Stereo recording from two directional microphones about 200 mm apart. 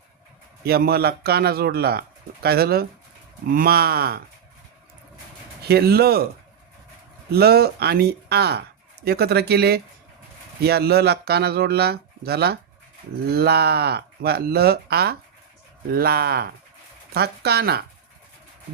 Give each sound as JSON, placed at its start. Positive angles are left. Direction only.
{"t": 0.6, "sound": "speech", "side_deg": -50}
{"t": 5.6, "sound": "speech", "side_deg": -50}
{"t": 7.3, "sound": "speech", "side_deg": -50}